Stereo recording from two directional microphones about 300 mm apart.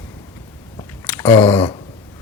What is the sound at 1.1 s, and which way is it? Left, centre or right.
Chewing, centre.